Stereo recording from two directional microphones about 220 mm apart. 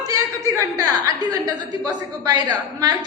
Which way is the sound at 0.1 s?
15° right (ahead or behind).